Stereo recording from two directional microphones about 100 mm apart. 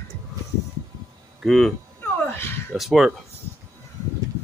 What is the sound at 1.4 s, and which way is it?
Speech, centre (ahead or behind).